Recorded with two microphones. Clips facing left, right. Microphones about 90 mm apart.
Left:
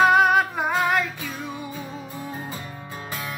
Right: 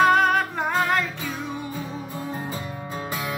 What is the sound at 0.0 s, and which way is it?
Music, 5° left (ahead or behind).